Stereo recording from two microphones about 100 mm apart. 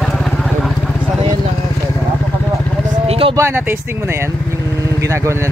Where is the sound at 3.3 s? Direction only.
25° right (ahead or behind).